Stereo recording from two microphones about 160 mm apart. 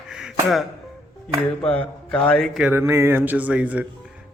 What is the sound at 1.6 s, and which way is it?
Speech, 5° left (ahead or behind).